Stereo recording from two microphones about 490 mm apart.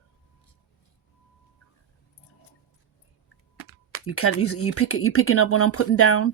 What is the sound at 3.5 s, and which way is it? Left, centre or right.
Speech, left.